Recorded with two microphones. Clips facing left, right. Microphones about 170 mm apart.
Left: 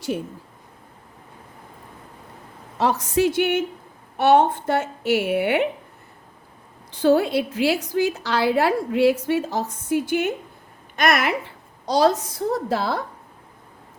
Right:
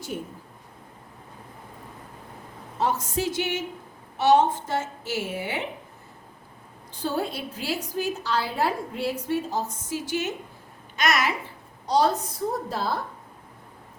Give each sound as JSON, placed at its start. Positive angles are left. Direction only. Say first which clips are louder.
{"t": 2.7, "sound": "a woman's voice", "louder": "left 6 dB", "side_deg": 80}
{"t": 6.9, "sound": "a woman's voice", "louder": "left 11 dB", "side_deg": 80}
{"t": 11.9, "sound": "a woman's voice", "louder": "left 4 dB", "side_deg": 80}